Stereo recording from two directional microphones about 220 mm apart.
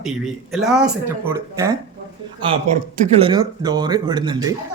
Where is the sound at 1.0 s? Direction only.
10° right (ahead or behind).